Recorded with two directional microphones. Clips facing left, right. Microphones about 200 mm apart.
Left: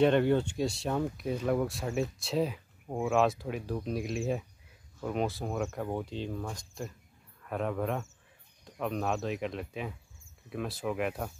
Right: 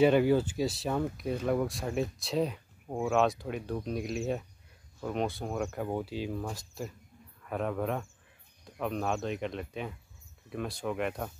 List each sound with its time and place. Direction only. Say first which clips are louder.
0.0 s speech: right 1 dB; 5° right (ahead or behind)